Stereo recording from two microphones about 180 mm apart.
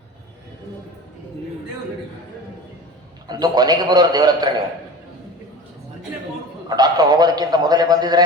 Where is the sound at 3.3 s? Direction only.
20° right (ahead or behind).